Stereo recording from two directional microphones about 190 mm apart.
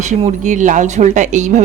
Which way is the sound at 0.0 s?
40° right (ahead or behind).